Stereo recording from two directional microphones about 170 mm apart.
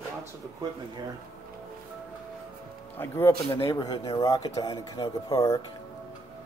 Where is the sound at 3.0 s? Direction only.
10° left (ahead or behind).